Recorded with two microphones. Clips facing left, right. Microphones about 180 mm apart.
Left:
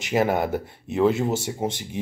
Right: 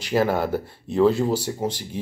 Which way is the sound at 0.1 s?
20° left (ahead or behind).